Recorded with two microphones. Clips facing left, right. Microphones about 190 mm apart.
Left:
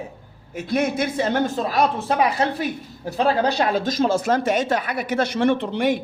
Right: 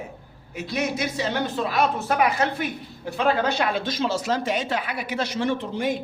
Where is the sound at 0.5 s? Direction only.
55° left (ahead or behind).